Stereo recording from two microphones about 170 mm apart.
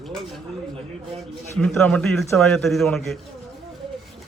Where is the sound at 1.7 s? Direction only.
5° left (ahead or behind).